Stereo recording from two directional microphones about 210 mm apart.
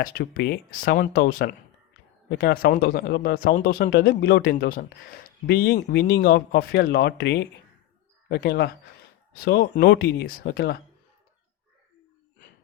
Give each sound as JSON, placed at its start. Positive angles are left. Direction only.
{"t": 0.0, "sound": "speech", "side_deg": 50}